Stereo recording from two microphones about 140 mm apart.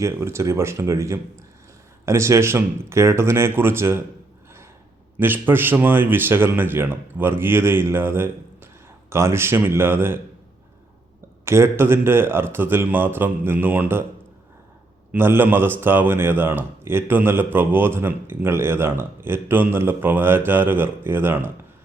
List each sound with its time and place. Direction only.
0.0 s speech: 20° right (ahead or behind)
5.1 s speech: 15° right (ahead or behind)
11.4 s speech: 20° right (ahead or behind)
15.1 s speech: 15° right (ahead or behind)